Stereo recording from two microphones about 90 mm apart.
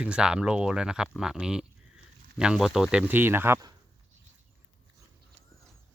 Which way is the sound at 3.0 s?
25° right (ahead or behind).